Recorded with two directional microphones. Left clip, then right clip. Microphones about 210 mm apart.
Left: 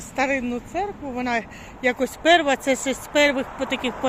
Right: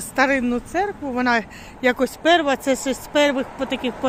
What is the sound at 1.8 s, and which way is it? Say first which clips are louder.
Speech: right 1 dB; 25° right (ahead or behind).